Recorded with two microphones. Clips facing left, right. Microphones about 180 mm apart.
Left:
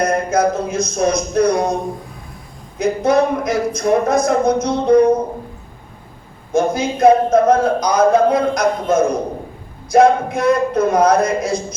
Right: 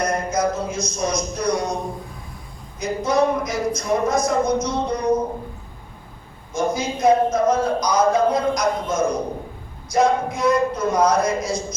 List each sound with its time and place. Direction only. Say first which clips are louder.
0.0 s speech: left 5 dB; 55° left (ahead or behind)
2.7 s a man's voice: left 6 dB; 60° left (ahead or behind)
6.5 s a man's voice: left 6 dB; 60° left (ahead or behind)